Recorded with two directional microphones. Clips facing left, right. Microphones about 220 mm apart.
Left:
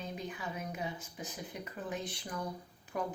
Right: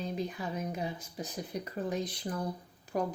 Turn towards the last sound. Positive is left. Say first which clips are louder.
# right 5 dB
turn(degrees=-40)  # may be behind; listen again after turning